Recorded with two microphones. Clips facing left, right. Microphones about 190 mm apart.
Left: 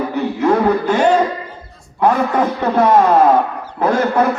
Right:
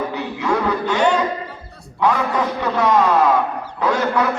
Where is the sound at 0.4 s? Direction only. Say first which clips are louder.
Left 6 dB; 50° left (ahead or behind).